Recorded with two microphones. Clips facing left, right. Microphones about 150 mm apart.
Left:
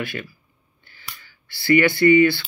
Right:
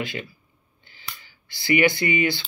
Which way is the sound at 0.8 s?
20° right (ahead or behind).